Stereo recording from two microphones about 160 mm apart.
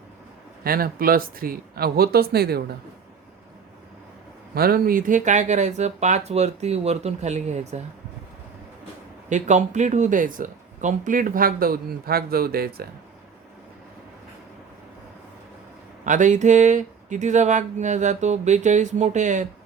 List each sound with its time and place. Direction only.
0.6 s speech: 65° right (ahead or behind); by 2.7 s 85° right
4.5 s speech: 70° right (ahead or behind); by 7.8 s 45° right (ahead or behind)
9.3 s speech: 45° right (ahead or behind); by 12.9 s 70° right (ahead or behind)
16.0 s speech: 50° right (ahead or behind)